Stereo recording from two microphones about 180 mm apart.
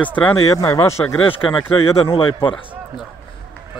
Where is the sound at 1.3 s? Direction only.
30° left (ahead or behind).